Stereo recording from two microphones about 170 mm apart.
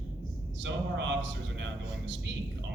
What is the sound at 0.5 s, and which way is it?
A man's voice, 90° right.